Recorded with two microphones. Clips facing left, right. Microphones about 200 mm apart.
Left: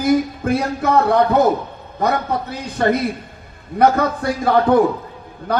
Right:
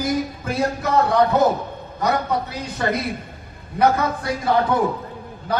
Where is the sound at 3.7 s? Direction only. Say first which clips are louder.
Left 3 dB; 55° left (ahead or behind).